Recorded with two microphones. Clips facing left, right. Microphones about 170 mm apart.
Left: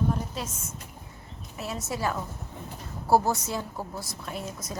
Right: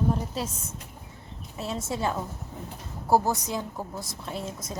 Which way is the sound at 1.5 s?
30° right (ahead or behind).